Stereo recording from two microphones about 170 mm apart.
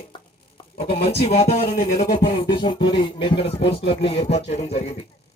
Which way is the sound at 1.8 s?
75° left (ahead or behind).